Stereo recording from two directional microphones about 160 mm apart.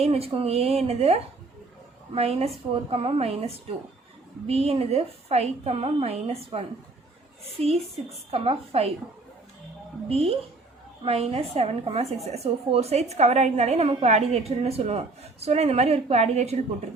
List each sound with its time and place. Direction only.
0.0 s a woman's voice: 40° right (ahead or behind)
8.3 s a woman's voice: 40° right (ahead or behind)
10.1 s a woman's voice: 40° right (ahead or behind)